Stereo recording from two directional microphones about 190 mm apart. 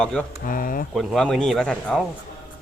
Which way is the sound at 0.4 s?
45° left (ahead or behind).